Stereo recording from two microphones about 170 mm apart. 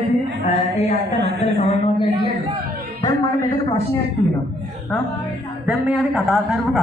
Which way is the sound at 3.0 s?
20° left (ahead or behind).